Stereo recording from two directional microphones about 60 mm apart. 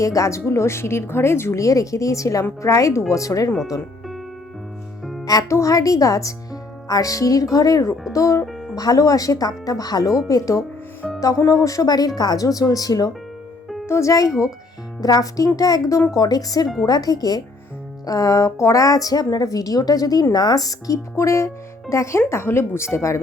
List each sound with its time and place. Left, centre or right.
0.0 s speech: left
1.5 s speech: left
5.2 s music: left
5.5 s a woman's voice: left
7.5 s a woman's voice: left
8.1 s speech: left
8.7 s a woman's voice: left
13.8 s speech: left
14.1 s speech: left
15.0 s a woman's voice: left